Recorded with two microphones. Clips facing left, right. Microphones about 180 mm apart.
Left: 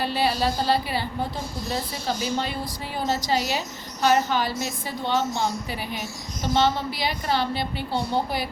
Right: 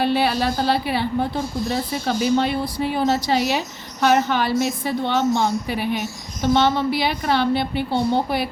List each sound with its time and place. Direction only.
0.0 s a woman's voice: 65° right (ahead or behind)
2.0 s a woman's voice: 65° right (ahead or behind)